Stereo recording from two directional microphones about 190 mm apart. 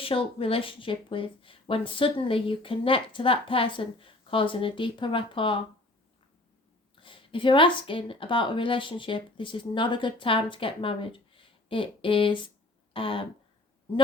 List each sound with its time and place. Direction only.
0.0 s speech: 30° left (ahead or behind)
7.0 s speech: 25° left (ahead or behind)
12.9 s a sound: 30° left (ahead or behind)